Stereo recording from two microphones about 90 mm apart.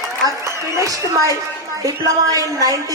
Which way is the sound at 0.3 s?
35° right (ahead or behind).